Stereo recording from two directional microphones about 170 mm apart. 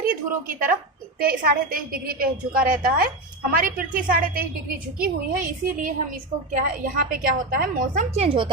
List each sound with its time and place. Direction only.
0.0 s a woman's voice: 55° right (ahead or behind)
8.1 s speech: 35° right (ahead or behind)